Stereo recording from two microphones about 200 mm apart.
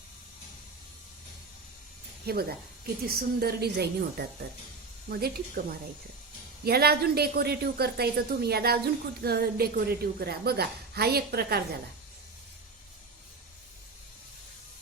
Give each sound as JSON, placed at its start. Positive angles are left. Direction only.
{"t": 2.2, "sound": "a woman's voice", "side_deg": -50}
{"t": 6.7, "sound": "a woman's voice", "side_deg": -50}